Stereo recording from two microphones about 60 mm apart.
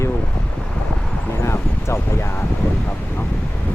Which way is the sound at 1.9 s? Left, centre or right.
Left.